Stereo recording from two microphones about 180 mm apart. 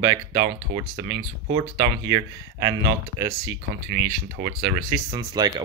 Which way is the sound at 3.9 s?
55° right (ahead or behind).